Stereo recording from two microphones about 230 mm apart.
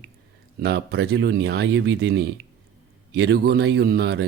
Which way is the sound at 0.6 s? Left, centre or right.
Right.